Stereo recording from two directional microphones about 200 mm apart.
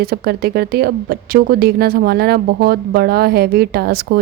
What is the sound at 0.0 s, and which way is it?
A woman's voice, 50° right (ahead or behind).